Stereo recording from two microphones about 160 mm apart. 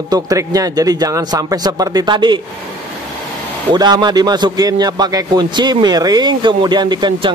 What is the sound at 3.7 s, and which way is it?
A man's voice, 25° right (ahead or behind).